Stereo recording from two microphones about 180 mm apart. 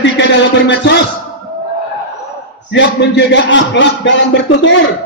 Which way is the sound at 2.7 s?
80° left.